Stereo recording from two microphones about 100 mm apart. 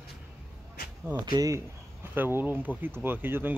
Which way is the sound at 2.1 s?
20° right (ahead or behind).